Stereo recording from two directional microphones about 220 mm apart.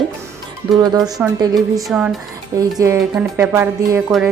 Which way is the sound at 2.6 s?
15° right (ahead or behind).